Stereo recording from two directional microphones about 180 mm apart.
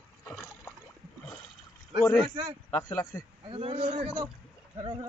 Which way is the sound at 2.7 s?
15° left (ahead or behind).